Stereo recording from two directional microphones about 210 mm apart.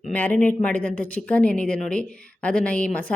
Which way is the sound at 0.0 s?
10° left (ahead or behind).